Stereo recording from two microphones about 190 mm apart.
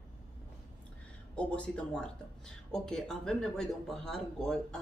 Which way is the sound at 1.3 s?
5° left (ahead or behind).